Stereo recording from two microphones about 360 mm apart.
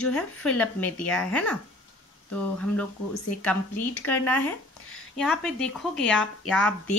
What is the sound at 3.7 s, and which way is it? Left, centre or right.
Speech, left.